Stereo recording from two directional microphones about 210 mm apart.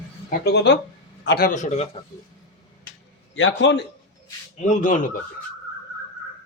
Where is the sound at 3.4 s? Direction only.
60° left (ahead or behind).